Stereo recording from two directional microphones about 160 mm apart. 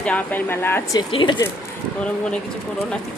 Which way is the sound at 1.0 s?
30° left (ahead or behind).